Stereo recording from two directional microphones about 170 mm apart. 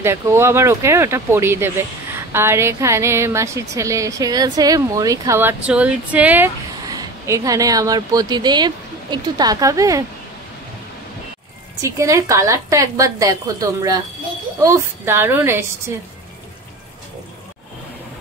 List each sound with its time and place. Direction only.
0.0 s a woman's voice: 15° right (ahead or behind)
6.9 s speech: 20° right (ahead or behind)
11.8 s a woman's voice: 20° right (ahead or behind)